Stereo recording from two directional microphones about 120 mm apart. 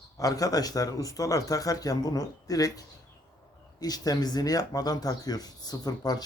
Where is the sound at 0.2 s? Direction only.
30° left (ahead or behind).